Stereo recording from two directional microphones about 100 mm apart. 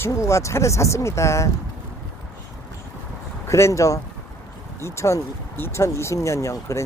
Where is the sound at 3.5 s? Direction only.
30° left (ahead or behind).